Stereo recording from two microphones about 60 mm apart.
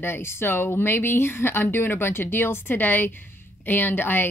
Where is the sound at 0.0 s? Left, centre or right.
Left.